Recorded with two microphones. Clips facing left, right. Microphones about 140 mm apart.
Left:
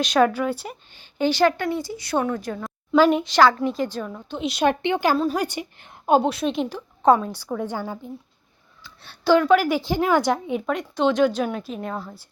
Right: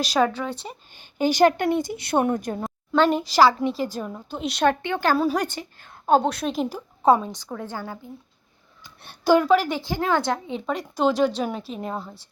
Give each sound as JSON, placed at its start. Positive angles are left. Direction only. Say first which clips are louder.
{"t": 0.1, "sound": "a woman's voice", "louder": "left 4 dB", "side_deg": 5}
{"t": 1.2, "sound": "speech", "louder": "right 1 dB", "side_deg": -15}
{"t": 2.6, "sound": "speech", "louder": "left 3 dB", "side_deg": 5}
{"t": 4.4, "sound": "a woman's voice", "louder": "left 2 dB", "side_deg": 0}
{"t": 4.6, "sound": "a woman's voice", "louder": "left 1 dB", "side_deg": 20}
{"t": 5.1, "sound": "a woman's voice", "louder": "right 1 dB", "side_deg": -5}
{"t": 5.4, "sound": "a woman's voice", "louder": "left 2 dB", "side_deg": 15}
{"t": 6.1, "sound": "a woman's voice", "louder": "left 1 dB", "side_deg": 5}
{"t": 7.3, "sound": "a woman's voice", "louder": "left 5 dB", "side_deg": 10}
{"t": 9.2, "sound": "speech", "louder": "even", "side_deg": -10}
{"t": 9.5, "sound": "a woman's voice", "louder": "left 2 dB", "side_deg": 5}
{"t": 9.8, "sound": "a woman's voice", "louder": "left 3 dB", "side_deg": 15}
{"t": 10.8, "sound": "a woman's voice", "louder": "left 1 dB", "side_deg": -5}